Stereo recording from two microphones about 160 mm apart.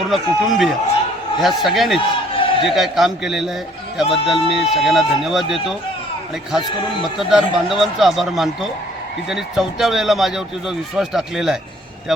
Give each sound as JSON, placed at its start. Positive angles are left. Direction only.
{"t": 0.1, "sound": "speech", "side_deg": 0}
{"t": 2.0, "sound": "a sound", "side_deg": 35}
{"t": 2.6, "sound": "speech", "side_deg": 0}
{"t": 4.0, "sound": "speech", "side_deg": 35}
{"t": 4.4, "sound": "speech", "side_deg": 0}
{"t": 7.2, "sound": "speech", "side_deg": 0}